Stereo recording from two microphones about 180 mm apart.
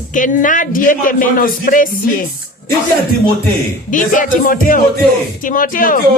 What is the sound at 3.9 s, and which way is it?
Speech, 45° left (ahead or behind).